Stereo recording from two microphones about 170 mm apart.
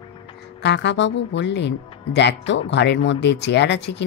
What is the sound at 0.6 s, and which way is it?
A woman's voice, 90° left.